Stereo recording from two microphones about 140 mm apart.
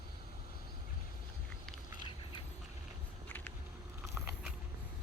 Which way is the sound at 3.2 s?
10° left (ahead or behind).